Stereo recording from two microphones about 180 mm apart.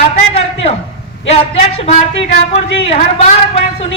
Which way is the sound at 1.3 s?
35° left (ahead or behind).